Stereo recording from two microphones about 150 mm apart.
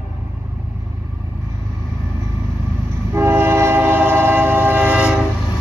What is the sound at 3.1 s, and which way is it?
Train, 15° right (ahead or behind).